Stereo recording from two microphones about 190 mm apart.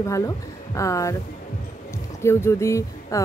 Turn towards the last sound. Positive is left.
turn(degrees=15)  # may be behind; listen again after turning